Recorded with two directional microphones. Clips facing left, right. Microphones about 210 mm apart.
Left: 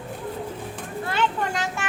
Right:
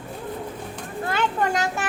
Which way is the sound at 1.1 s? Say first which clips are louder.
Right 2 dB; 45° right (ahead or behind).